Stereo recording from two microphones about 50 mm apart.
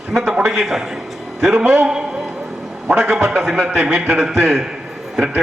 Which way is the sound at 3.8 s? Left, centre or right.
Right.